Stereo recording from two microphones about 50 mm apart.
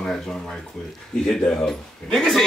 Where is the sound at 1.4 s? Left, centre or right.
Centre.